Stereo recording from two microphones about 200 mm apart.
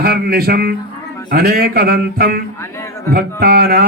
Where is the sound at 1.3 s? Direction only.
50° right (ahead or behind).